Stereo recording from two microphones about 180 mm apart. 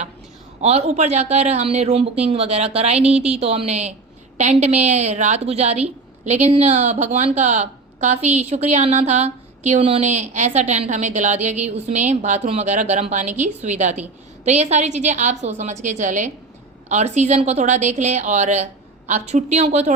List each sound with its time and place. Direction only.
0.6 s a woman's voice: 35° right (ahead or behind)